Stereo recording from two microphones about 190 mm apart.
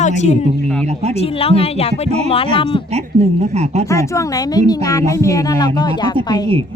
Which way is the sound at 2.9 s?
35° right (ahead or behind).